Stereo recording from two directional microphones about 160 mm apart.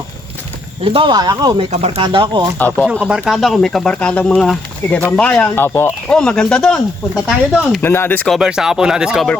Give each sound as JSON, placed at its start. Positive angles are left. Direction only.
{"t": 0.9, "sound": "speech", "side_deg": -30}
{"t": 1.7, "sound": "speech", "side_deg": -40}
{"t": 2.0, "sound": "speech", "side_deg": -30}
{"t": 2.6, "sound": "speech", "side_deg": 10}
{"t": 3.0, "sound": "speech", "side_deg": -5}
{"t": 7.8, "sound": "speech", "side_deg": 15}
{"t": 8.4, "sound": "speech", "side_deg": -5}